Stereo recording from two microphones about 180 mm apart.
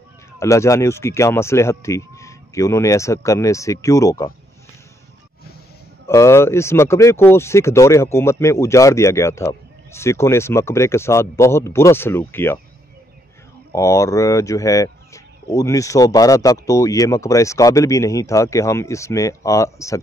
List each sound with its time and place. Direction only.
0.4 s speech: 15° left (ahead or behind)
6.0 s speech: 15° left (ahead or behind)
13.7 s speech: 15° left (ahead or behind)